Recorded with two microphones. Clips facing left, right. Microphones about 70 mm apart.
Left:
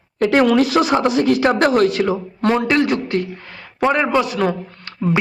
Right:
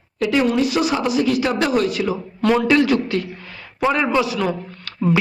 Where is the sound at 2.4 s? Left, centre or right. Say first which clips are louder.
Right 1 dB; left.